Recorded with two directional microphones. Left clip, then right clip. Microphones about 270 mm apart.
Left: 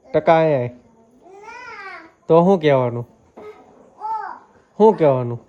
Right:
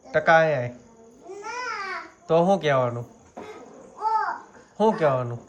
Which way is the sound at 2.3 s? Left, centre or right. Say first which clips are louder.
Left 6 dB; centre.